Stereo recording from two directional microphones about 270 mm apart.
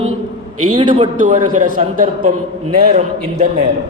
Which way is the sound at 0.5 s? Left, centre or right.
Right.